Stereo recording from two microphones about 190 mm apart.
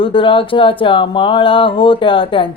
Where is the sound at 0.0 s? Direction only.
25° left (ahead or behind).